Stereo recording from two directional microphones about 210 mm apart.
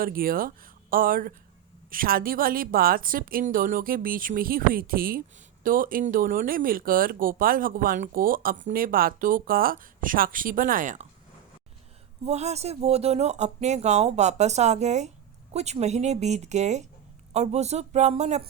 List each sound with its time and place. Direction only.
0.0 s a woman's voice: 45° right (ahead or behind)
12.2 s speech: 30° right (ahead or behind)